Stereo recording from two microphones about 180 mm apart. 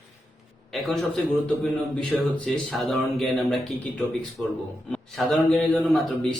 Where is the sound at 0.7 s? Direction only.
Centre (ahead or behind).